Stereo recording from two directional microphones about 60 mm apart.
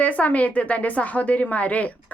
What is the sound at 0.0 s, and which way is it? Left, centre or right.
A woman's voice, left.